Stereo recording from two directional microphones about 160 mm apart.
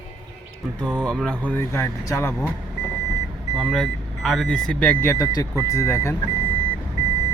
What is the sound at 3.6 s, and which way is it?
Speech, centre (ahead or behind).